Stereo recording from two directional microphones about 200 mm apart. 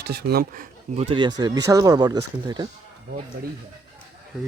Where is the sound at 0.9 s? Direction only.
25° right (ahead or behind).